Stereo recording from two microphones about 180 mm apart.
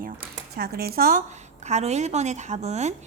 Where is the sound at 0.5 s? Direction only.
60° right (ahead or behind).